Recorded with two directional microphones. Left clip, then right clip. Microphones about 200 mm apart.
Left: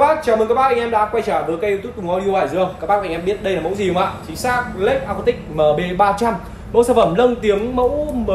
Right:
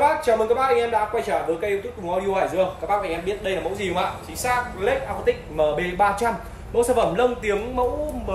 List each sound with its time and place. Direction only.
0.0 s a man's voice: centre (ahead or behind)